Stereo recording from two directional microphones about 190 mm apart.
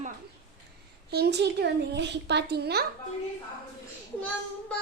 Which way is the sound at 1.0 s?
60° right (ahead or behind).